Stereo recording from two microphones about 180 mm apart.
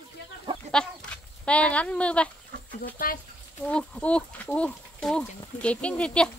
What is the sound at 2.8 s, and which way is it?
Speech, 55° left (ahead or behind).